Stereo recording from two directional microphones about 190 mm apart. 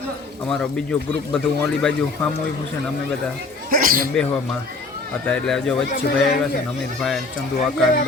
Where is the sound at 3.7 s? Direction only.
50° right (ahead or behind).